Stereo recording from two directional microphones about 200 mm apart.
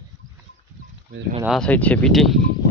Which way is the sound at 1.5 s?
5° left (ahead or behind).